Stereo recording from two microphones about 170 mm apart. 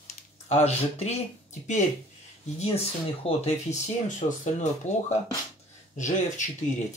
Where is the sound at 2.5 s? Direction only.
35° left (ahead or behind).